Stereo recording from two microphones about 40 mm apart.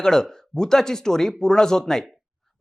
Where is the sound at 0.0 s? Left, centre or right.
Centre.